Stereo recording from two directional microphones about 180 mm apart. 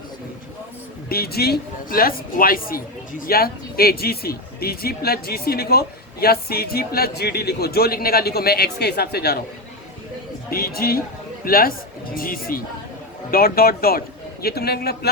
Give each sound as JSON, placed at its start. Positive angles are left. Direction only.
{"t": 1.1, "sound": "speech", "side_deg": 60}
{"t": 10.5, "sound": "speech", "side_deg": 55}